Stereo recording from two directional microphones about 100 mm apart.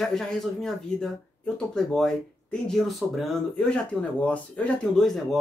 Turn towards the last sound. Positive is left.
turn(degrees=0)  # may be behind; listen again after turning